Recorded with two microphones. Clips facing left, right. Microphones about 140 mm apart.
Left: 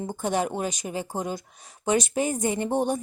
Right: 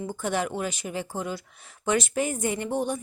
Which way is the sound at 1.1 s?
40° left (ahead or behind).